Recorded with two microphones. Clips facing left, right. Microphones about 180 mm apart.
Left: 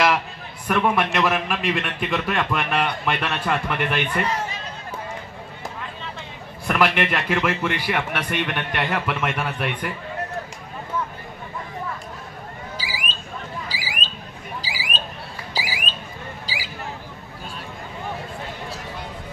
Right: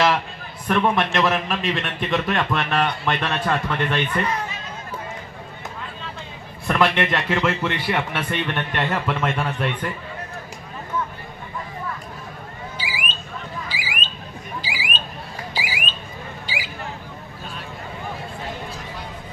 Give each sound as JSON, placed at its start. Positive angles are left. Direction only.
{"t": 0.7, "sound": "a man's voice", "side_deg": 5}
{"t": 6.7, "sound": "a man's voice", "side_deg": 10}
{"t": 12.7, "sound": "a sound", "side_deg": 40}
{"t": 15.5, "sound": "alarm", "side_deg": 35}